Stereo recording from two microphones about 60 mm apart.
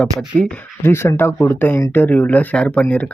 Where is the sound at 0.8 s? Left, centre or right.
Left.